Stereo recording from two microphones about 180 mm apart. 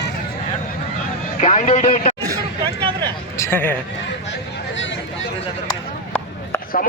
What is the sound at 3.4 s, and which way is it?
Speech, 10° left (ahead or behind).